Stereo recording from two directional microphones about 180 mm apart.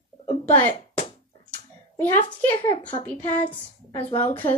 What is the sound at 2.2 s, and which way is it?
A woman's voice, 25° left (ahead or behind).